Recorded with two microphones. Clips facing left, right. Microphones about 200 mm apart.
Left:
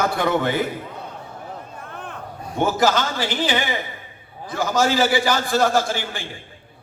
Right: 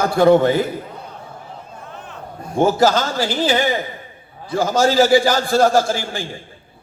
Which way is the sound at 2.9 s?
40° right (ahead or behind).